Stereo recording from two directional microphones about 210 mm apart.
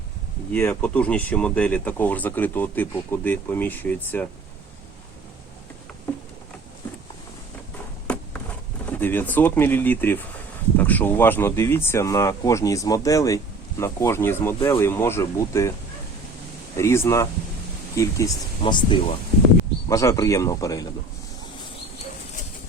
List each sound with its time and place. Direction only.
0.5 s speech: 10° left (ahead or behind)
8.0 s a sound: 5° left (ahead or behind)
8.9 s speech: 10° left (ahead or behind)
16.7 s speech: 15° left (ahead or behind)